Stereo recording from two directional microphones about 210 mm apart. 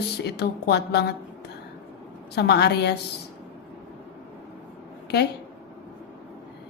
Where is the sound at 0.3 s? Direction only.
50° left (ahead or behind).